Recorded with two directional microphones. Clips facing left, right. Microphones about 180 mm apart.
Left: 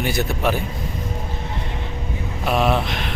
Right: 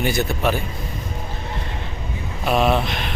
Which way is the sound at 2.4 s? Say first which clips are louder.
Right 1 dB; 5° left (ahead or behind).